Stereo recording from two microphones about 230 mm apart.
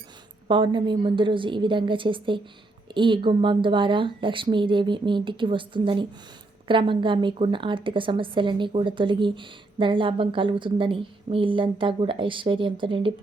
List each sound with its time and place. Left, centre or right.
0.4 s a woman's voice: right